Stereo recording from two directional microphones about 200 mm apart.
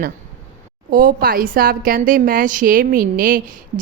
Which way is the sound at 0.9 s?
45° right (ahead or behind).